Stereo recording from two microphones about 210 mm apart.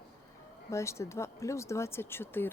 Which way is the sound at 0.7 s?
15° left (ahead or behind).